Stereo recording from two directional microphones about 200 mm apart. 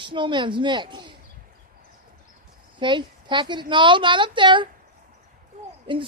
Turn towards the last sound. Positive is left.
turn(degrees=-25)  # may be behind; listen again after turning